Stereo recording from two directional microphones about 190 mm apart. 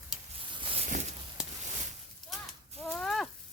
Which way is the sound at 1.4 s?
5° right (ahead or behind).